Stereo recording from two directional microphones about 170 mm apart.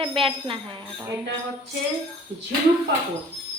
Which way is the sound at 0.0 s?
30° right (ahead or behind).